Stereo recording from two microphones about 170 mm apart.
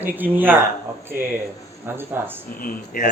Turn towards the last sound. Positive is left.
turn(degrees=55)  # may be behind; listen again after turning